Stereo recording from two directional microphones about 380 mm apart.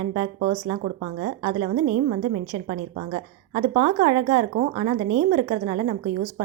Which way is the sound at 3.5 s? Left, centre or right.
Centre.